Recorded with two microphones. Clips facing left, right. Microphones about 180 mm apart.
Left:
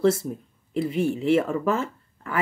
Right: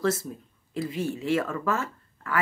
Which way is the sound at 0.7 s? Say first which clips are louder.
Left 6 dB; 25° left (ahead or behind).